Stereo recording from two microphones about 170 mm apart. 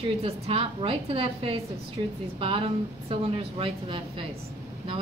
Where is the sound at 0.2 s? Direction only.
35° right (ahead or behind).